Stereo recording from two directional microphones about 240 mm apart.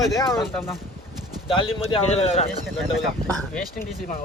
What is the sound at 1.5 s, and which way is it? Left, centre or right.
Speech, left.